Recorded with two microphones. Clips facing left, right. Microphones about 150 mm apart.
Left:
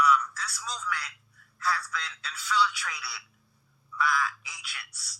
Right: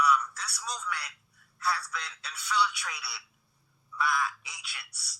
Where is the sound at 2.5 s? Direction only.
20° right (ahead or behind).